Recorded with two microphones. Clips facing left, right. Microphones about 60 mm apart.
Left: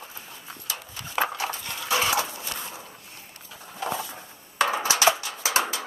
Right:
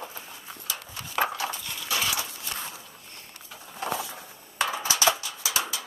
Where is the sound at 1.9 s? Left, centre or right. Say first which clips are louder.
Left 5 dB; left.